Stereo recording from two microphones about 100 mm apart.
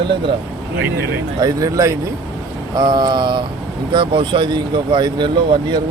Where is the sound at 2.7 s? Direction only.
45° right (ahead or behind).